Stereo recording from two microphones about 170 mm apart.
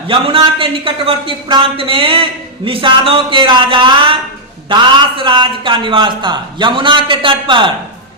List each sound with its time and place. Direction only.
0.1 s a man's voice: 30° right (ahead or behind)